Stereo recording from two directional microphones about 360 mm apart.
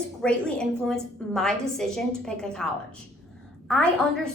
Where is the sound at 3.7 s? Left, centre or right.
Centre.